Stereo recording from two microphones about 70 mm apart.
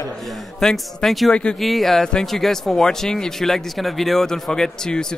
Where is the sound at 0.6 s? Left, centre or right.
Centre.